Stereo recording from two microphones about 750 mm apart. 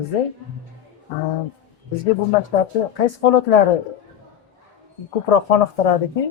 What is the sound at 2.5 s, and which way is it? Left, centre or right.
A woman's voice, left.